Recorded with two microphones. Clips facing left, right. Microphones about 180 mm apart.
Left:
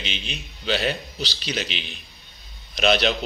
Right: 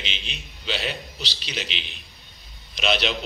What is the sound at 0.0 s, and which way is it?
A man's voice, 45° left (ahead or behind).